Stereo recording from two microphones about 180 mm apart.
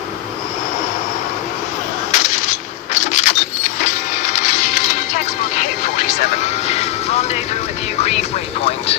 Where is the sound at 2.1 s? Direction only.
40° left (ahead or behind).